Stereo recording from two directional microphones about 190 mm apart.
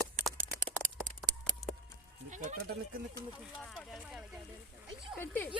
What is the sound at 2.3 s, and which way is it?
Speech, 40° right (ahead or behind).